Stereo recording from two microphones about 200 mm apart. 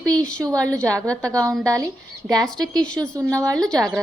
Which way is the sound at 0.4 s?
15° right (ahead or behind).